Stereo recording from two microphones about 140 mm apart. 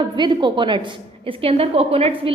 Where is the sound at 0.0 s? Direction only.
30° right (ahead or behind).